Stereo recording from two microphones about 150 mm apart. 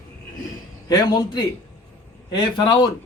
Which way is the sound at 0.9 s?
25° left (ahead or behind).